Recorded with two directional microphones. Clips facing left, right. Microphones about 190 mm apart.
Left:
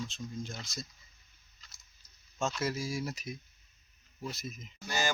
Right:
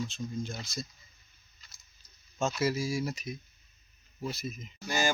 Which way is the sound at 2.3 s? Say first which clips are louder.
Right 4 dB; 5° right (ahead or behind).